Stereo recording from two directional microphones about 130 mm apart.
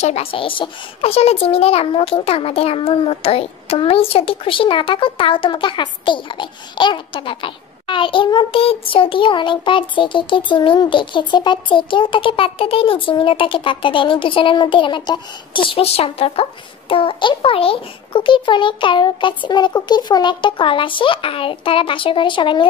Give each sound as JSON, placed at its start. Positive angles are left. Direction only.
{"t": 0.0, "sound": "a child's voice", "side_deg": 50}